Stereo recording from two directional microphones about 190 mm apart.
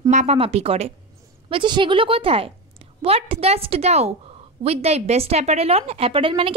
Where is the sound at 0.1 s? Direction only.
35° right (ahead or behind).